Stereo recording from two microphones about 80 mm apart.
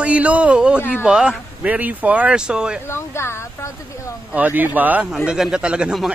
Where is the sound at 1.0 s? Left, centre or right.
Centre.